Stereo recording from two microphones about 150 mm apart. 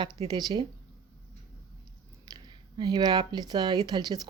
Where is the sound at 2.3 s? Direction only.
25° right (ahead or behind).